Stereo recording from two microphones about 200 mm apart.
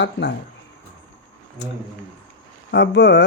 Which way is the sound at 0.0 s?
60° left (ahead or behind).